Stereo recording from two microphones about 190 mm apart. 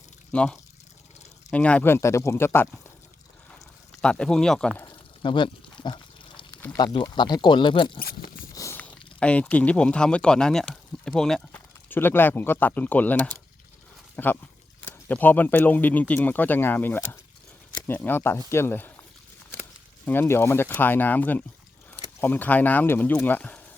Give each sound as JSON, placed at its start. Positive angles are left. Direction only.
{"t": 0.3, "sound": "speech", "side_deg": 5}
{"t": 4.0, "sound": "speech", "side_deg": 5}
{"t": 4.9, "sound": "pig", "side_deg": 25}
{"t": 6.7, "sound": "speech", "side_deg": 25}
{"t": 7.9, "sound": "speech", "side_deg": 50}
{"t": 8.5, "sound": "speech", "side_deg": 15}
{"t": 20.1, "sound": "speech", "side_deg": 10}